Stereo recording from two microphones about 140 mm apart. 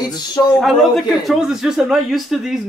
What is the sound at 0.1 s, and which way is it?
Speech, 30° left (ahead or behind).